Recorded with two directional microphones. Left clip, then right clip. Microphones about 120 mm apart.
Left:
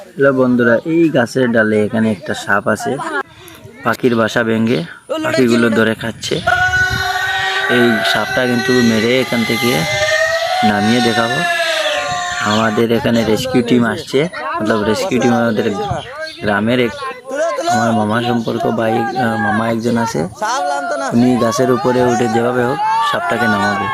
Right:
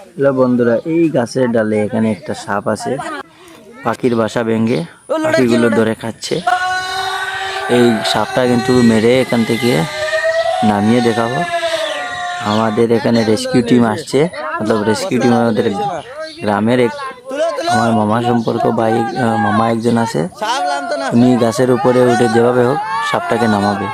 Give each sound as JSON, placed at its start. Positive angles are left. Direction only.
{"t": 0.2, "sound": "speech", "side_deg": 0}
{"t": 5.1, "sound": "a man's voice", "side_deg": -35}
{"t": 7.7, "sound": "speech", "side_deg": -40}
{"t": 10.7, "sound": "a man's voice", "side_deg": -20}
{"t": 12.5, "sound": "a man's voice", "side_deg": -15}
{"t": 13.0, "sound": "a man's voice", "side_deg": -35}
{"t": 17.3, "sound": "a sound", "side_deg": -25}
{"t": 17.9, "sound": "a man's voice", "side_deg": -20}
{"t": 18.8, "sound": "a man's voice", "side_deg": -35}
{"t": 23.4, "sound": "speech", "side_deg": -30}